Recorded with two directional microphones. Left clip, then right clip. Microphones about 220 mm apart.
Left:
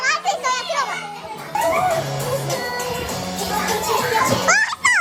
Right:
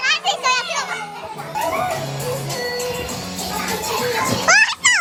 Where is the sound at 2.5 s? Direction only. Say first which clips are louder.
Even; 25° left (ahead or behind).